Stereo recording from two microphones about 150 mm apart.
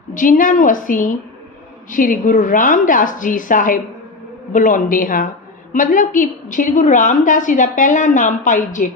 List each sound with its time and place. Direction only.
0.1 s a woman's voice: 60° left (ahead or behind)